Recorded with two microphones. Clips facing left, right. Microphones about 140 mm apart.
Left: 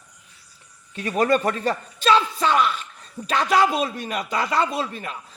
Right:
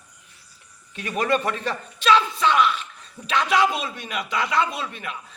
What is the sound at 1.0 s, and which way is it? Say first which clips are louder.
Speech: left 3 dB; 35° left (ahead or behind).